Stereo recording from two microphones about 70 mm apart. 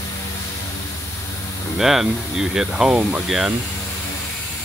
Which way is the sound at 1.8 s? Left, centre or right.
Centre.